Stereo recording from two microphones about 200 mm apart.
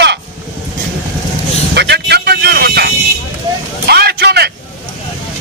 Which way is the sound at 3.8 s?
55° right (ahead or behind).